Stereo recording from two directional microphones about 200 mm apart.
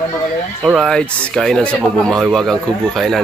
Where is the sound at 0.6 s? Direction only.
Centre (ahead or behind).